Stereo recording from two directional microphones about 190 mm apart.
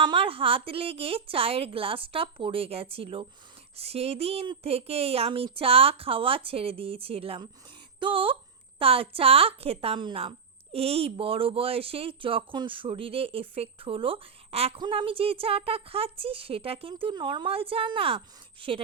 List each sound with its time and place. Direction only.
0.0 s a woman's voice: 25° right (ahead or behind)